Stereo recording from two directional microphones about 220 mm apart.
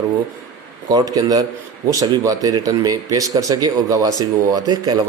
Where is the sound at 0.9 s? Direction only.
15° right (ahead or behind).